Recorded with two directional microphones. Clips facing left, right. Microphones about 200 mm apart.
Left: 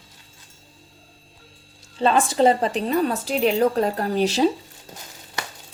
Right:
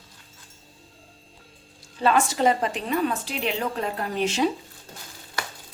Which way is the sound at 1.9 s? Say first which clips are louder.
Left 3 dB; 30° left (ahead or behind).